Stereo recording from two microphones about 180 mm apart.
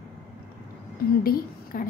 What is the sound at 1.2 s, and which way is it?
Speech, 55° left (ahead or behind).